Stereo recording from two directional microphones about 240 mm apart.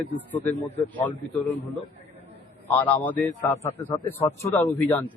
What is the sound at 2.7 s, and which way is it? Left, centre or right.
A man's voice, centre.